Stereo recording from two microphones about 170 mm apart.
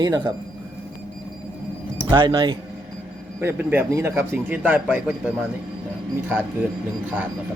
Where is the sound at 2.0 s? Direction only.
25° right (ahead or behind).